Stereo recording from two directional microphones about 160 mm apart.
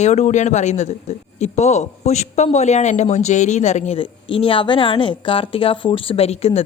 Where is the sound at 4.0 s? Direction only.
35° left (ahead or behind).